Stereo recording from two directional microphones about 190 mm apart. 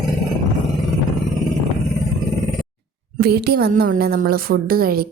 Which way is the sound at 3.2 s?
55° right (ahead or behind).